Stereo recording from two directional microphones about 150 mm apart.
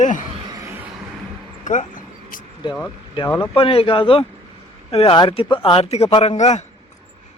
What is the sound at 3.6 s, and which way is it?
A man's voice, 40° left (ahead or behind).